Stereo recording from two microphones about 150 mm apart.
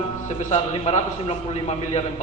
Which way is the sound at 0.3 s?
45° left (ahead or behind).